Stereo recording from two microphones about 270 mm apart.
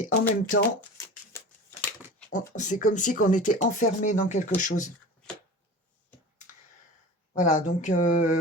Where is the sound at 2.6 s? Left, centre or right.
Left.